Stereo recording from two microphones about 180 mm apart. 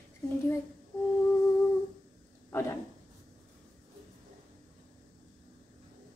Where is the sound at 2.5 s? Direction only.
15° left (ahead or behind).